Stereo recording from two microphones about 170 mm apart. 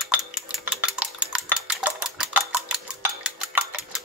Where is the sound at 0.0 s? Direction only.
5° right (ahead or behind).